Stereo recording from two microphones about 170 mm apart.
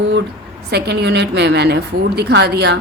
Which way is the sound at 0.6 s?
70° right (ahead or behind).